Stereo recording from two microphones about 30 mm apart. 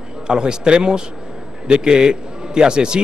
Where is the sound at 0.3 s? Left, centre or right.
Right.